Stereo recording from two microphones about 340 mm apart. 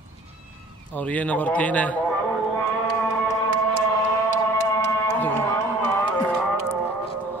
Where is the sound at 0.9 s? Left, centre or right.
Centre.